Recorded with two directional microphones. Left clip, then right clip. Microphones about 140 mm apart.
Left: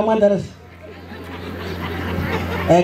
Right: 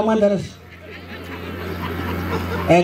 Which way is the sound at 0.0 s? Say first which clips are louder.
Left 2 dB; 35° right (ahead or behind).